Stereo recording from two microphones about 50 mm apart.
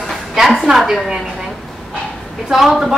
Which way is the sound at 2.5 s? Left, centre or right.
Centre.